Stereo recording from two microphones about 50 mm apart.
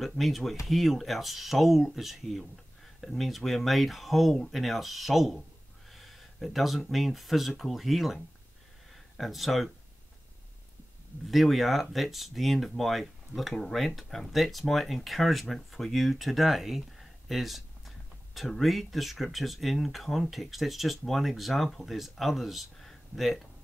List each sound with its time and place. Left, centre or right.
0.0 s speech: centre
11.2 s speech: centre